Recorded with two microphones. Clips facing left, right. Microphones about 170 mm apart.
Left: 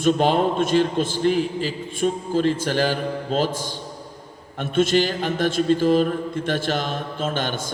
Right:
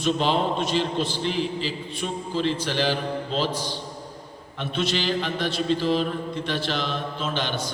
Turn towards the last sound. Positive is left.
turn(degrees=50)  # may be behind; listen again after turning